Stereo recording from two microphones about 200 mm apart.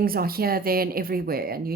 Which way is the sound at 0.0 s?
50° right (ahead or behind).